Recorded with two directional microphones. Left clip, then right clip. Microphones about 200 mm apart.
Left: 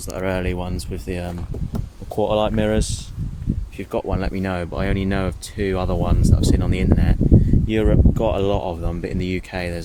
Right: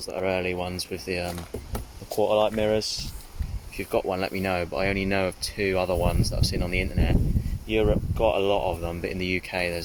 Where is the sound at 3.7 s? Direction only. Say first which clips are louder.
Left 1 dB; 5° left (ahead or behind).